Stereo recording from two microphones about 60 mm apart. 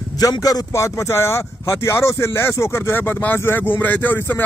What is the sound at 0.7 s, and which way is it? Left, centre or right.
Speech, left.